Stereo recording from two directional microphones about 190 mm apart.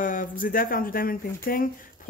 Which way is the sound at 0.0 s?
45° left (ahead or behind).